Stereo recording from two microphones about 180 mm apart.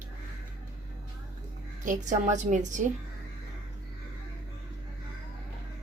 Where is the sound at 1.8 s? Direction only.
45° right (ahead or behind).